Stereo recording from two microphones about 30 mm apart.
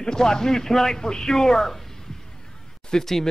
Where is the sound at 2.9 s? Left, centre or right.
Left.